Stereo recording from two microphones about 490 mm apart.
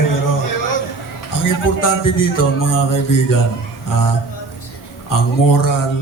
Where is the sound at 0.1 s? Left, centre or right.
Left.